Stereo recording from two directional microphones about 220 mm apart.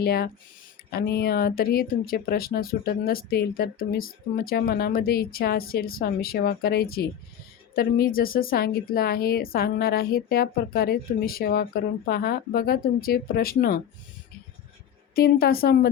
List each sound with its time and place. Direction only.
0.0 s speech: 45° left (ahead or behind)
15.1 s speech: 45° left (ahead or behind)